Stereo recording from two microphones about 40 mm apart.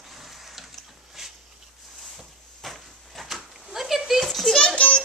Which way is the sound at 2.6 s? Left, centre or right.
Centre.